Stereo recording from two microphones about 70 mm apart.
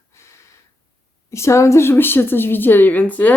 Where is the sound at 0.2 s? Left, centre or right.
Left.